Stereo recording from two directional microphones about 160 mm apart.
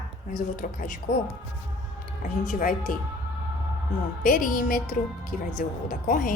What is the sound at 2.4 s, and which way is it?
Speech, 60° left (ahead or behind).